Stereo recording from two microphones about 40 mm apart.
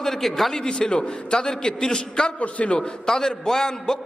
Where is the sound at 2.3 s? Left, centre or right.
Left.